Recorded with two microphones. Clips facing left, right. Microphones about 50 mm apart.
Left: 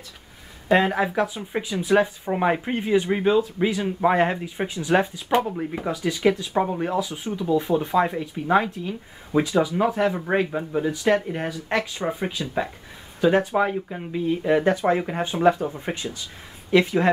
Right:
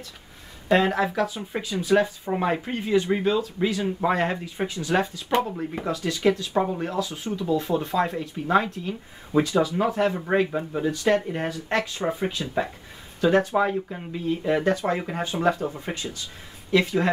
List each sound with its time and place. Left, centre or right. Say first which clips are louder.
0.7 s speech: left 1 dB; centre
10.4 s speech: left 1 dB; centre; by 15.0 s left
15.0 s speech: left 3 dB; centre